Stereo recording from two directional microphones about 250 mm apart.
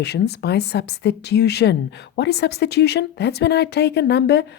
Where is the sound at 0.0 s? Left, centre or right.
Left.